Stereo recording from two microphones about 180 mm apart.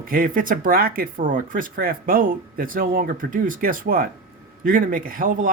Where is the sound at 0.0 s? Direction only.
55° right (ahead or behind).